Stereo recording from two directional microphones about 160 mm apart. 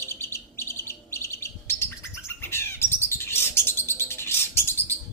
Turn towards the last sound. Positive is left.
turn(degrees=15)  # may be behind; listen again after turning